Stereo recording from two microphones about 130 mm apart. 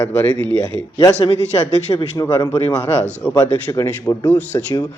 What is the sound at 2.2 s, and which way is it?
Speech, 25° left (ahead or behind).